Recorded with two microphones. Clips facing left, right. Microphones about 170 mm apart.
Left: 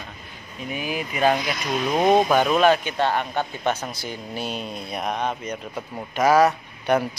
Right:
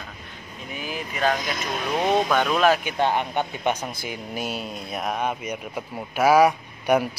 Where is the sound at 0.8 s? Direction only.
15° left (ahead or behind).